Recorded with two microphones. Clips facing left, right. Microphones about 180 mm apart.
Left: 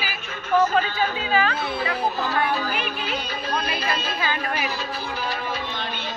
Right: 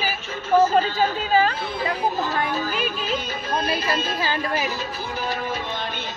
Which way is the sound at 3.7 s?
45° right (ahead or behind).